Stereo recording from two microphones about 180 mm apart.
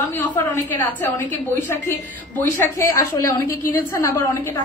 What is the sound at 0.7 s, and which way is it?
A woman's voice, 10° left (ahead or behind).